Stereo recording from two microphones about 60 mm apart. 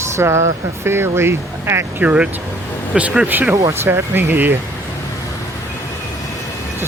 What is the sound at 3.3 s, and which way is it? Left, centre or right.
Speech, right.